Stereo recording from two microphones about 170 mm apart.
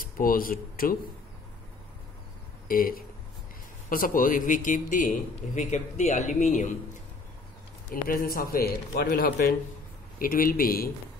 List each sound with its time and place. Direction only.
0.0 s speech: 55° left (ahead or behind)
2.7 s a man's voice: 55° left (ahead or behind)
7.9 s speech: 55° left (ahead or behind)